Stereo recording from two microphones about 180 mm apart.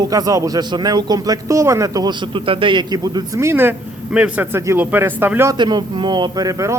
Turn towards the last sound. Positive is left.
turn(degrees=-15)  # may be behind; listen again after turning